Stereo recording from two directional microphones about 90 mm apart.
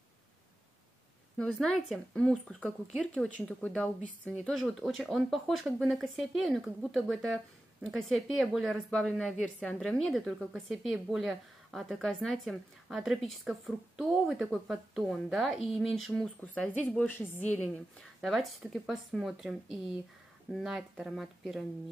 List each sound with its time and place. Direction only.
1.4 s speech: 10° left (ahead or behind)
17.9 s speech: centre (ahead or behind)